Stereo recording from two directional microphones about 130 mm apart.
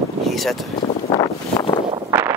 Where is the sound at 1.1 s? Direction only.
35° left (ahead or behind).